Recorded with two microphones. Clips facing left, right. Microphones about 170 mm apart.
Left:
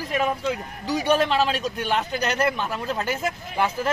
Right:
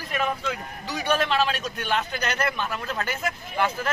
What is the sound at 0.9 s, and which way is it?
A man's voice, 30° left (ahead or behind).